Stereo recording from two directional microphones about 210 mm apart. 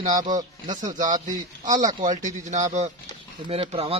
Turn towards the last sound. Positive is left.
turn(degrees=-30)  # may be behind; listen again after turning